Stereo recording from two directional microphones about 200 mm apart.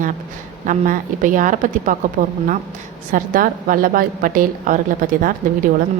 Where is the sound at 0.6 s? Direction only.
40° right (ahead or behind).